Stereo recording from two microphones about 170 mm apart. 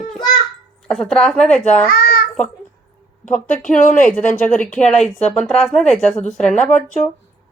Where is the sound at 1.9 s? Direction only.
60° left (ahead or behind).